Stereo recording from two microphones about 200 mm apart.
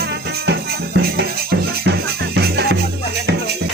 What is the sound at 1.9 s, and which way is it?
Music, 55° right (ahead or behind).